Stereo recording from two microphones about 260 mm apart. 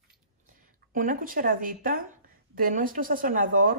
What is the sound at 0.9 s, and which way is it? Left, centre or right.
A woman's voice, right.